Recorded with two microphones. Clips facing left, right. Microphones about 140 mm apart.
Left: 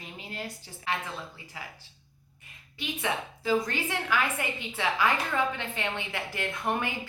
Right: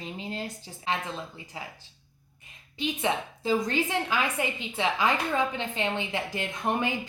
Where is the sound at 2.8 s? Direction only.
20° right (ahead or behind).